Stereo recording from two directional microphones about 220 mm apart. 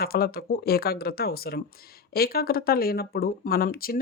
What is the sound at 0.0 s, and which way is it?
Speech, 45° left (ahead or behind).